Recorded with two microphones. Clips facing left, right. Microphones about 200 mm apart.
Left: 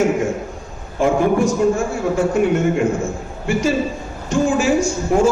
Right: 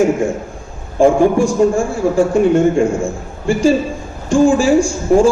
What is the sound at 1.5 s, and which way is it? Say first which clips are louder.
A man's voice: right 3 dB; 30° right (ahead or behind).